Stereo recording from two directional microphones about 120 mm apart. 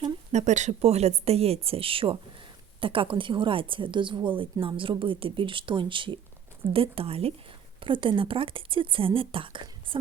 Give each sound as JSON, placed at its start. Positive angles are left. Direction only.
{"t": 0.3, "sound": "a woman's voice", "side_deg": -75}
{"t": 7.8, "sound": "speech", "side_deg": -45}